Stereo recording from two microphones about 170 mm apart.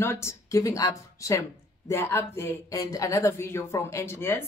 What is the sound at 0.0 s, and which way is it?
A woman's voice, 15° left (ahead or behind).